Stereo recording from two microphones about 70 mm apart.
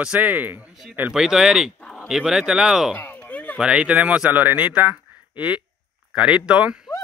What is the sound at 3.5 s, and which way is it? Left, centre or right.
Speech, centre.